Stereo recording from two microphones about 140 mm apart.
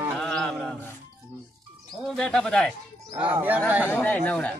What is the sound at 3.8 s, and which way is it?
Speech, 15° left (ahead or behind).